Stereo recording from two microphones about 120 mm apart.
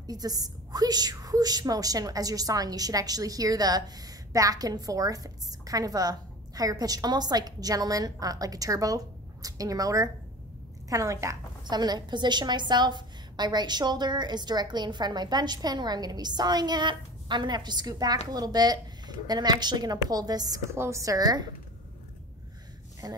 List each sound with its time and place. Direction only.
0.0 s a woman's voice: 30° right (ahead or behind)
23.0 s a woman's voice: 35° right (ahead or behind)